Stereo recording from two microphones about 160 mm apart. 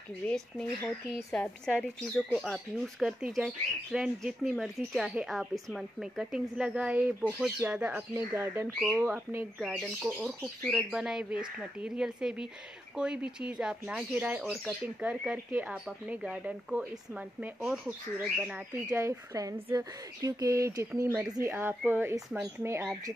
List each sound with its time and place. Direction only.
0.2 s speech: 5° left (ahead or behind)
19.0 s speech: 20° right (ahead or behind)